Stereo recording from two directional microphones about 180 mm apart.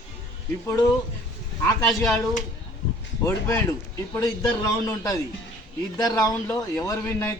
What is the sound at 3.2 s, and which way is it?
Speech, 15° left (ahead or behind).